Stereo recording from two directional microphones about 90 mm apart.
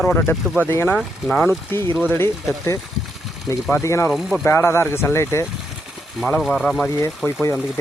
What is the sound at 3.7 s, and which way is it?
Speech, 30° left (ahead or behind).